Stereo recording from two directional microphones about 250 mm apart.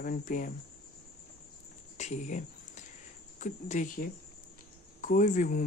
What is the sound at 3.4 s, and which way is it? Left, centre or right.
Speech, left.